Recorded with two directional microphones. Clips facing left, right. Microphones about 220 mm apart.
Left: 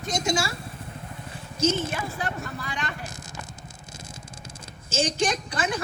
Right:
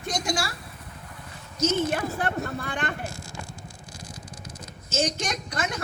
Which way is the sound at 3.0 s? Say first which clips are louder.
Right 3 dB; 20° left (ahead or behind).